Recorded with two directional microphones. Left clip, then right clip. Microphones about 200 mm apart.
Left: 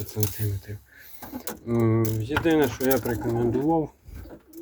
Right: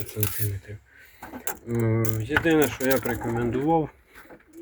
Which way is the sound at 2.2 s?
Centre (ahead or behind).